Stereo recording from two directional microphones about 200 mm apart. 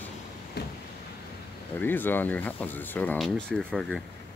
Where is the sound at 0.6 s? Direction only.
55° left (ahead or behind).